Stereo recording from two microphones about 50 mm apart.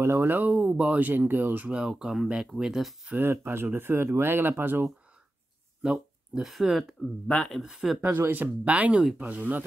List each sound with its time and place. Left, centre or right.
0.0 s speech: right
0.3 s speech: right
1.7 s speech: centre
3.2 s speech: right
5.8 s a sound: centre
6.4 s speech: centre
7.2 s speech: centre
7.8 s speech: centre
8.2 s speech: right
8.6 s speech: right